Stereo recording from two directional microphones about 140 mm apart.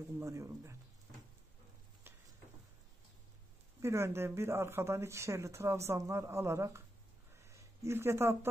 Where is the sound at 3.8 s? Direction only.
20° right (ahead or behind).